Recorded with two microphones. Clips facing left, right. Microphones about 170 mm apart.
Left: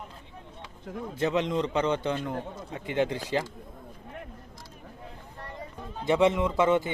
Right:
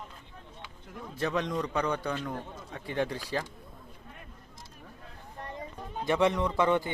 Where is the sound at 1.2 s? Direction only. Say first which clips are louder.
Left 4 dB; 20° left (ahead or behind).